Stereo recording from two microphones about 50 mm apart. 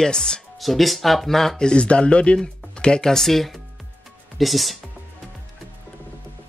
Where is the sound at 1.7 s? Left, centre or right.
Left; by 4.7 s centre.